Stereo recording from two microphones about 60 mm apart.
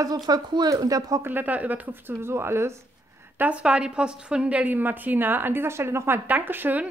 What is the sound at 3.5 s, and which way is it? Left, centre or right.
A woman's voice, centre.